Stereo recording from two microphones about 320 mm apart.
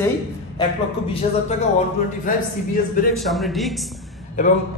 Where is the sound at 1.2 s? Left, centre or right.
Left.